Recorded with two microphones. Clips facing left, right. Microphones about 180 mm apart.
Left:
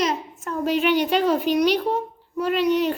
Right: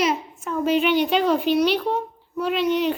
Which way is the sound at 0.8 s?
10° left (ahead or behind).